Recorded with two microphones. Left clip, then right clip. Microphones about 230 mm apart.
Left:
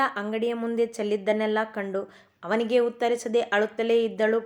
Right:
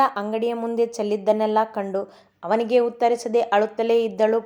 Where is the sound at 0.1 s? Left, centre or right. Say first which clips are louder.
Right 4 dB; centre.